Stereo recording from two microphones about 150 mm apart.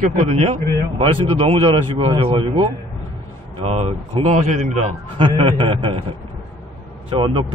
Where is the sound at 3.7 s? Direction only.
45° right (ahead or behind).